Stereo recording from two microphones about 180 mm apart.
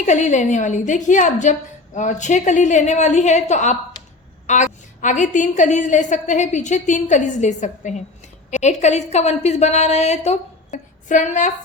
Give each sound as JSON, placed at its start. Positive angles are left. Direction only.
{"t": 0.0, "sound": "a woman's voice", "side_deg": 40}